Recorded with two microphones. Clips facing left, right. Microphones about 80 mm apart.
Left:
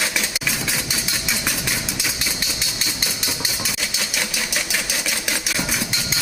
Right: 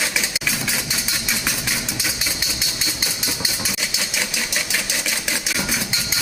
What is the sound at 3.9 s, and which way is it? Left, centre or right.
Typewriter, centre.